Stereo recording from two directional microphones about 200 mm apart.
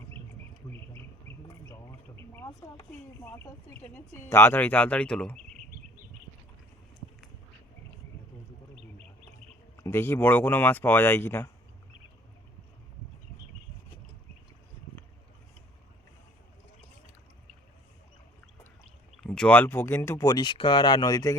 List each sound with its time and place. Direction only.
1.6 s speech: 15° left (ahead or behind)
9.7 s speech: 15° left (ahead or behind)
19.2 s speech: 5° left (ahead or behind)